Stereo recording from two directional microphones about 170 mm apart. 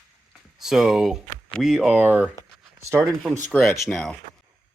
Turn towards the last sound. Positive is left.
turn(degrees=0)  # may be behind; listen again after turning